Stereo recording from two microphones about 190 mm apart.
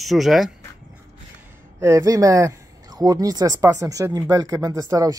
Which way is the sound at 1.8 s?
15° right (ahead or behind).